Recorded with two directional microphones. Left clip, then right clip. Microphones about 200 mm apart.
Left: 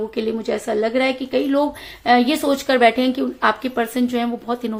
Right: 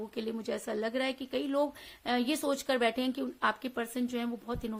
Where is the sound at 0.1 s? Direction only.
35° right (ahead or behind).